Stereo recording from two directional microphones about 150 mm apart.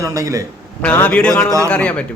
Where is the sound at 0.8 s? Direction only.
10° left (ahead or behind).